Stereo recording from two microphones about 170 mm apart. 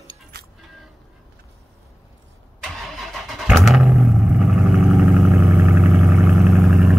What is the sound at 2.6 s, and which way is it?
Vehicle, centre (ahead or behind).